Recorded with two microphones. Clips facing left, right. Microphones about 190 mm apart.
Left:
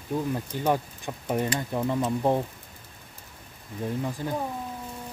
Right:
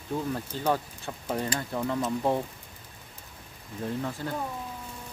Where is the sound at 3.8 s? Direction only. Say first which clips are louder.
Left 2 dB; 15° left (ahead or behind).